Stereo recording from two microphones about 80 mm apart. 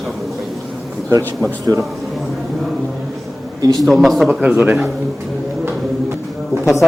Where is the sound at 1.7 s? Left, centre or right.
Right.